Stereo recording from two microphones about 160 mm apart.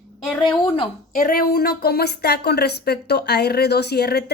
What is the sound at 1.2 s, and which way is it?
A woman's voice, 65° left (ahead or behind).